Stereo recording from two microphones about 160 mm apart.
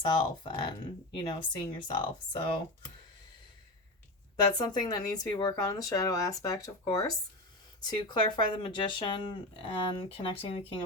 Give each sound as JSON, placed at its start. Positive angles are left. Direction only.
{"t": 0.0, "sound": "speech", "side_deg": 30}
{"t": 4.5, "sound": "speech", "side_deg": 25}